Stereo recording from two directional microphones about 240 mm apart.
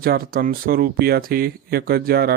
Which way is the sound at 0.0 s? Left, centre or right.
Right.